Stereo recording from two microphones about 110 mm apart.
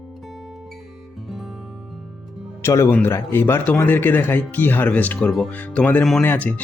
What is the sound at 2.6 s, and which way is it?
Speech, 25° left (ahead or behind).